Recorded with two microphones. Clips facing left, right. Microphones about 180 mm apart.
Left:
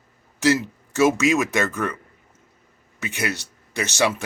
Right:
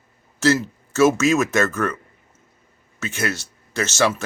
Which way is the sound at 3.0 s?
15° left (ahead or behind).